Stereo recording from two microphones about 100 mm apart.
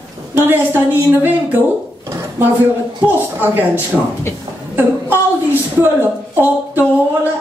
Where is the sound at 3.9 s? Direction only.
Centre (ahead or behind).